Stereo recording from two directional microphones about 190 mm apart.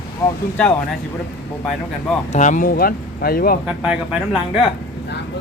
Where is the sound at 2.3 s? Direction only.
40° left (ahead or behind).